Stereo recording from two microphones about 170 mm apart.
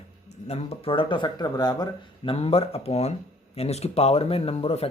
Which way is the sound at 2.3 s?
35° left (ahead or behind).